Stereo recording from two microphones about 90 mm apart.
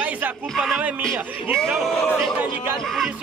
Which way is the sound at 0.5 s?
5° right (ahead or behind).